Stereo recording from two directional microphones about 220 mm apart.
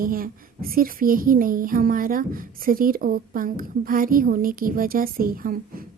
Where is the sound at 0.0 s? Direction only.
40° right (ahead or behind).